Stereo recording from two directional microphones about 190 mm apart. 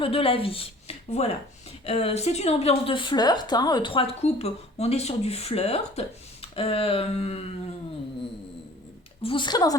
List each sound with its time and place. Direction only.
0.0 s a woman's voice: 30° left (ahead or behind)
9.2 s a woman's voice: 25° left (ahead or behind)